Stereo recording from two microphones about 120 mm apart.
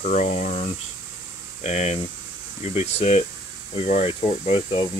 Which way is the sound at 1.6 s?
65° left (ahead or behind).